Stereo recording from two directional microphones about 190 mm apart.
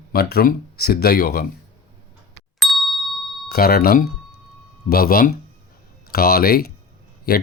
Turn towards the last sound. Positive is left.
turn(degrees=50)  # may be behind; listen again after turning